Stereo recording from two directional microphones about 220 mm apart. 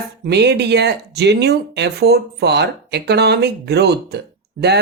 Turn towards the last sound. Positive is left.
turn(degrees=-50)  # may be behind; listen again after turning